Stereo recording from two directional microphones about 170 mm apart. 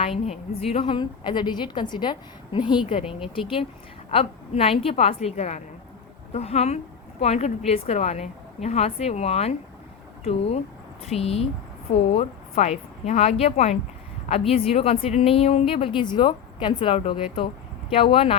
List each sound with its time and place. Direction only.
0.0 s a woman's voice: 35° left (ahead or behind)
3.0 s speech: 5° right (ahead or behind)
3.3 s a woman's voice: 30° left (ahead or behind)